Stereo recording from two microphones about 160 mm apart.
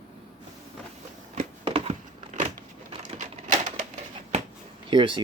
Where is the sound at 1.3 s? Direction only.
40° right (ahead or behind).